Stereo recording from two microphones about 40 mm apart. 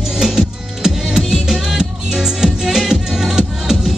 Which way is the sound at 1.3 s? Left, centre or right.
Centre.